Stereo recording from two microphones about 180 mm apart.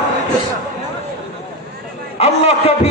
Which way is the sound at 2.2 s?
35° left (ahead or behind).